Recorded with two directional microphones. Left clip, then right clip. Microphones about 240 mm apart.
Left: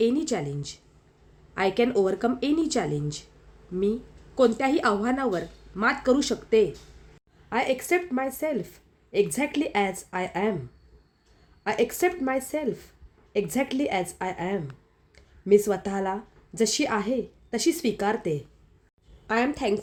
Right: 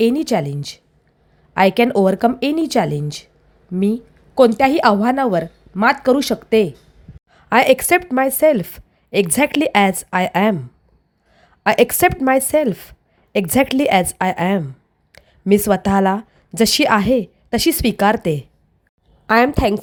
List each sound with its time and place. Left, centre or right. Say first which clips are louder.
0.0 s a woman's voice: right 8 dB; right
4.4 s a woman's voice: right 10 dB; right
11.6 s a woman's voice: right 11 dB; right